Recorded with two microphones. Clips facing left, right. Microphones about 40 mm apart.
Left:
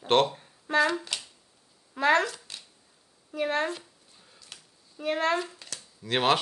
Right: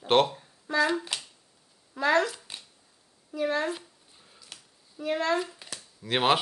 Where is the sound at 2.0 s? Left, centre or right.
Left.